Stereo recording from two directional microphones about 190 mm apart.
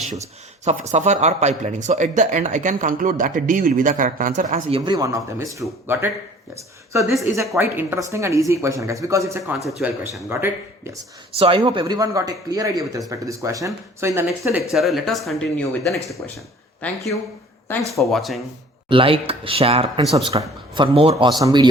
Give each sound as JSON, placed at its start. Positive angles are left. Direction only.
{"t": 0.6, "sound": "speech", "side_deg": -35}
{"t": 4.7, "sound": "speech", "side_deg": -20}
{"t": 11.3, "sound": "speech", "side_deg": -25}
{"t": 14.7, "sound": "speech", "side_deg": 0}
{"t": 16.8, "sound": "speech", "side_deg": 15}
{"t": 18.0, "sound": "speech", "side_deg": 0}
{"t": 18.9, "sound": "speech", "side_deg": -30}